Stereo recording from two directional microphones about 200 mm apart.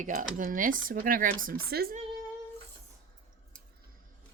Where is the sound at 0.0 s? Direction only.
40° right (ahead or behind).